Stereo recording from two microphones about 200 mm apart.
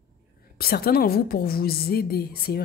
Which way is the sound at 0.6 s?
50° left (ahead or behind).